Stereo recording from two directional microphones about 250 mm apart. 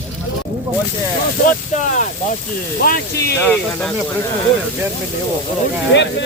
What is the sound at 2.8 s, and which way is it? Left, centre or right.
Speech, left.